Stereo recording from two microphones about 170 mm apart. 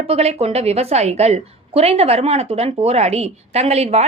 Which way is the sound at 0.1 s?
35° right (ahead or behind).